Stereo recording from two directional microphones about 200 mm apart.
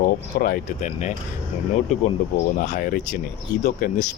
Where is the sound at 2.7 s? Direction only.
45° left (ahead or behind).